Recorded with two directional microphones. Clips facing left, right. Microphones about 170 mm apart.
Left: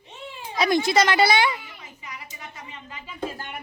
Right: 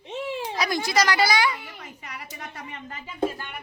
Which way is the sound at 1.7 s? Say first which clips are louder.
Right 2 dB; 65° right (ahead or behind).